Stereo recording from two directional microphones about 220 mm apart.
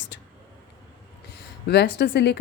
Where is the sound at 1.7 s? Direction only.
50° left (ahead or behind).